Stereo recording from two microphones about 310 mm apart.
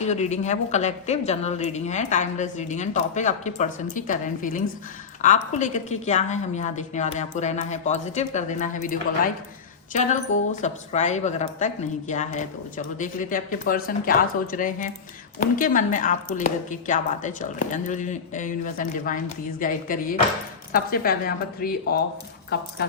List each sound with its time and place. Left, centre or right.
0.0 s a woman's voice: left